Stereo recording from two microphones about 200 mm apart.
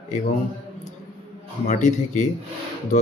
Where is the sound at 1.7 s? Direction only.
35° left (ahead or behind).